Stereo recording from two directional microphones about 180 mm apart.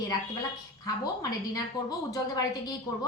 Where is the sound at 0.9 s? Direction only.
20° left (ahead or behind).